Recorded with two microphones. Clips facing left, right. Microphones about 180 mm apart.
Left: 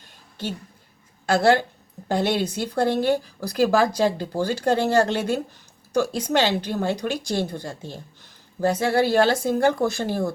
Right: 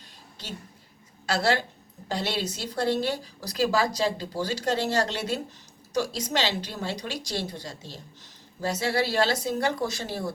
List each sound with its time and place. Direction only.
1.3 s a woman's voice: 50° left (ahead or behind)